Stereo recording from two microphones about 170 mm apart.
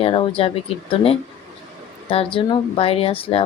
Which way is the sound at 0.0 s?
35° left (ahead or behind).